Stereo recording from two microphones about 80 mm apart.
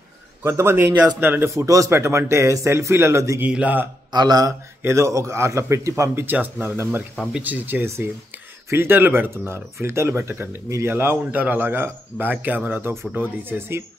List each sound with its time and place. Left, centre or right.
0.4 s a man's voice: right
1.5 s a man's voice: right
3.3 s a man's voice: centre
4.1 s speech: right
4.8 s a man's voice: right
6.2 s a man's voice: right